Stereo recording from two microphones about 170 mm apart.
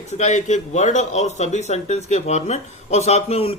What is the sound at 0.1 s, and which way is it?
Speech, 45° left (ahead or behind).